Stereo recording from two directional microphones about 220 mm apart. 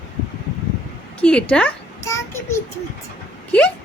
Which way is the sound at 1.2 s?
5° left (ahead or behind).